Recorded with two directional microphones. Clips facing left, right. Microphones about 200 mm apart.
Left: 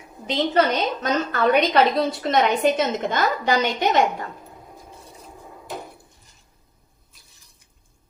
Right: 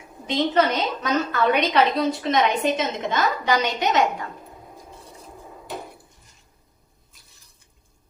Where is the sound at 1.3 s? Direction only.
35° left (ahead or behind).